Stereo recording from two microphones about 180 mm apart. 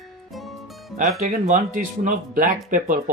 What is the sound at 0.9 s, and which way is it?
Speech, 45° right (ahead or behind).